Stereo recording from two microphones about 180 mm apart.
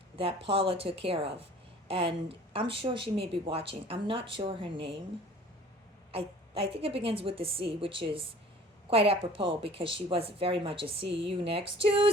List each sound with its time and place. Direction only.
0.2 s a woman's voice: 30° right (ahead or behind)
6.1 s a woman's voice: 30° right (ahead or behind)